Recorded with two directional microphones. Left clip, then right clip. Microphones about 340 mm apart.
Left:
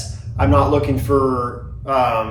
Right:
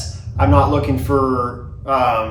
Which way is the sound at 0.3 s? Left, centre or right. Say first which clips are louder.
Right 1 dB; centre.